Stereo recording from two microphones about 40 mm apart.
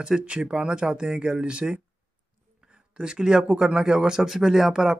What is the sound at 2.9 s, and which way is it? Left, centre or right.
Speech, centre.